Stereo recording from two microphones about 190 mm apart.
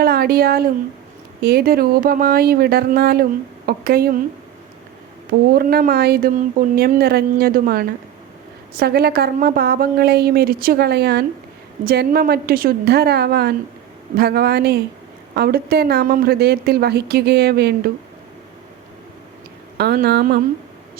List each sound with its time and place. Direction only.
0.0 s speech: 55° right (ahead or behind)
5.5 s a woman's voice: 50° right (ahead or behind)
19.7 s a woman's voice: 55° right (ahead or behind)